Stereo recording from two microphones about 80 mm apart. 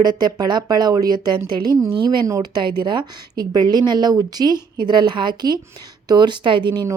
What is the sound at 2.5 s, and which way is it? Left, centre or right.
Speech, right.